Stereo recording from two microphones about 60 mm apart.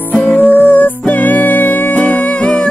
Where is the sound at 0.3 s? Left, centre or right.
Left.